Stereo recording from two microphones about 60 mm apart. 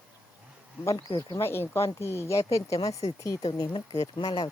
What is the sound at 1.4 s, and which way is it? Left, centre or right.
Speech, left.